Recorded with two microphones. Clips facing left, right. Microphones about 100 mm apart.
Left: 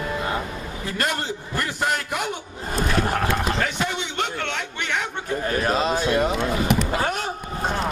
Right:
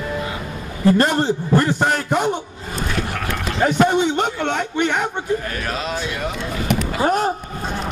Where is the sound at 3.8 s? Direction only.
45° right (ahead or behind).